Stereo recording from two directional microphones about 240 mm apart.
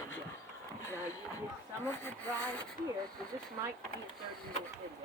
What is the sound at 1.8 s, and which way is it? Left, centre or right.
Speech, centre.